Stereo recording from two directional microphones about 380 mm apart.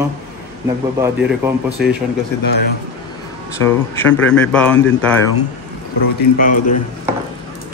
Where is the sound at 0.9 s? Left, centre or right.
Centre.